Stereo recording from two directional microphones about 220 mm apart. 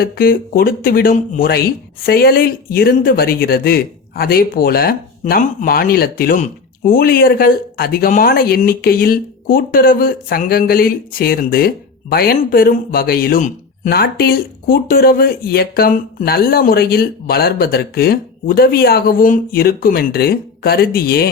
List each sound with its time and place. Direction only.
0.0 s speech: 40° left (ahead or behind)